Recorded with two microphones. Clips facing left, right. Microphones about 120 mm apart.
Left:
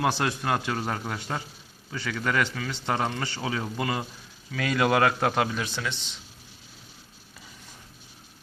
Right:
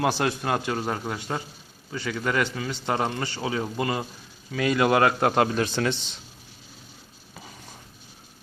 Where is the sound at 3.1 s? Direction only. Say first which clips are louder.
Right 2 dB; 20° right (ahead or behind).